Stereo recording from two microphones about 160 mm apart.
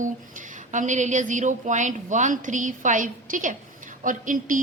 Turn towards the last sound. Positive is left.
turn(degrees=-55)  # may be behind; listen again after turning